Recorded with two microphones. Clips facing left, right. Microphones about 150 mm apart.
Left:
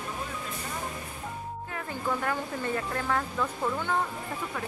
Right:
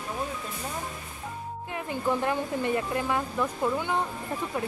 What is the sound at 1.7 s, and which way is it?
Speech, 20° right (ahead or behind).